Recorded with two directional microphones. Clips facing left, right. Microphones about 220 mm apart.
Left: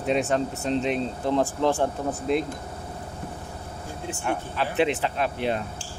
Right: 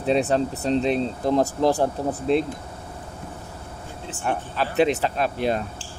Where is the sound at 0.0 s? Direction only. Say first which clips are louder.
Right 3 dB; 35° right (ahead or behind).